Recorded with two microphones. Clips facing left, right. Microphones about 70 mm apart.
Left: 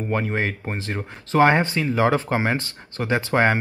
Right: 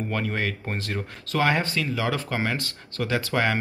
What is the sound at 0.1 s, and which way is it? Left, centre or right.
Speech, left.